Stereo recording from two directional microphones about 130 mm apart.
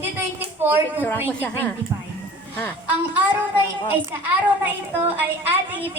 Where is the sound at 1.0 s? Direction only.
15° left (ahead or behind).